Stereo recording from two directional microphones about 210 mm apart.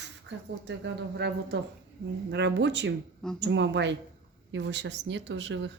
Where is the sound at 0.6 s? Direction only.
55° right (ahead or behind).